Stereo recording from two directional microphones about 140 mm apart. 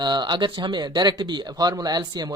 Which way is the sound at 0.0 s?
30° right (ahead or behind).